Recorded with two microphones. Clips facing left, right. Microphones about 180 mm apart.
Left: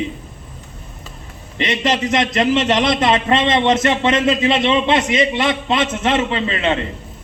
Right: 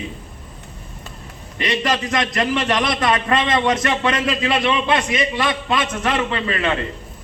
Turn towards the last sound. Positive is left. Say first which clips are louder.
# left 2 dB
turn(degrees=20)  # may be behind; listen again after turning